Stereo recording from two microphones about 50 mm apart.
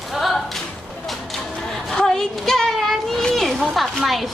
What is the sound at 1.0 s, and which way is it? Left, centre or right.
Music, centre.